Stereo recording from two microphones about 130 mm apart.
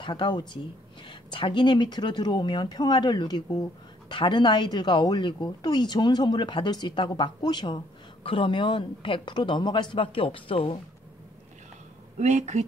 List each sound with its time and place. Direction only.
0.0 s speech: 35° left (ahead or behind)
12.2 s speech: 65° right (ahead or behind)